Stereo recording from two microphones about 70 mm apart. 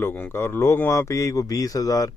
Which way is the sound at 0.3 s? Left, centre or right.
Left.